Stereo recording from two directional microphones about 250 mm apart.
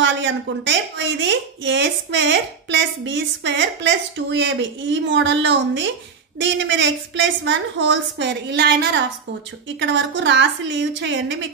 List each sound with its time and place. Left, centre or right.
0.0 s speech: right